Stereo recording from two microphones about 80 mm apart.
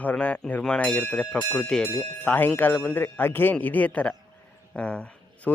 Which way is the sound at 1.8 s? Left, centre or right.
Left.